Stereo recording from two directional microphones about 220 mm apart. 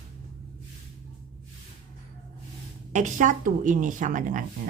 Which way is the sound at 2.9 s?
35° right (ahead or behind).